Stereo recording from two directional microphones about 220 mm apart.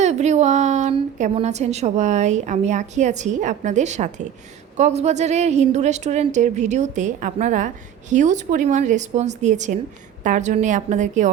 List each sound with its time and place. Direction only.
0.0 s a woman's voice: 30° right (ahead or behind)